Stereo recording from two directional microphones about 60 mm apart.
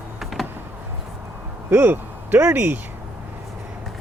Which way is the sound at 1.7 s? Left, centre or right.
Right.